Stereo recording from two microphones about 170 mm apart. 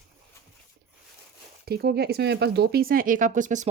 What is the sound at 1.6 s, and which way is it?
Speech, 65° right (ahead or behind).